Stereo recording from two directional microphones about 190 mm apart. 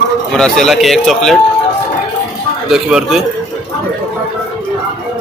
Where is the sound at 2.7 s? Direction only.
Centre (ahead or behind).